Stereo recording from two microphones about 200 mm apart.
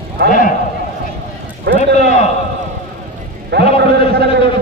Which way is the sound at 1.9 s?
50° right (ahead or behind).